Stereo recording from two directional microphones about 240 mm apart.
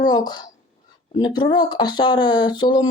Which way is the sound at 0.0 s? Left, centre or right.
Centre.